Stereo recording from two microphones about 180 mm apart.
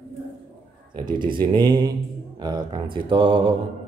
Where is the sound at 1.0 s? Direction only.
25° right (ahead or behind).